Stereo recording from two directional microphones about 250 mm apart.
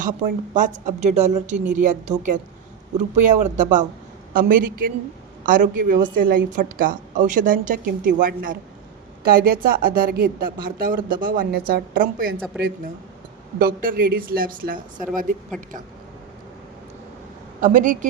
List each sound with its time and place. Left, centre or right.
0.5 s a woman's voice: right
13.6 s a woman's voice: right
17.6 s a woman's voice: right